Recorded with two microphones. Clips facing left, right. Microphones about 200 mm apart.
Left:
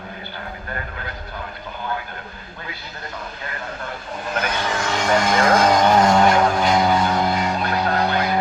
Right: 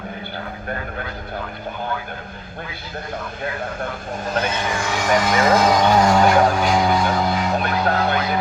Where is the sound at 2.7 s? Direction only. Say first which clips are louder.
Right 3 dB; 50° right (ahead or behind).